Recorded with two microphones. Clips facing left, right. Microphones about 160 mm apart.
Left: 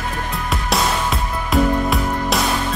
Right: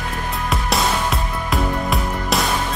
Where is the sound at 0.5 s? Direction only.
Centre (ahead or behind).